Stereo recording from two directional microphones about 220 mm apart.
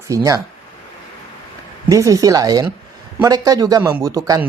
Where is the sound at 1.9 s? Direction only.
15° right (ahead or behind).